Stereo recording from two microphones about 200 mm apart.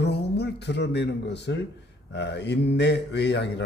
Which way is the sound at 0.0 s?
55° left (ahead or behind).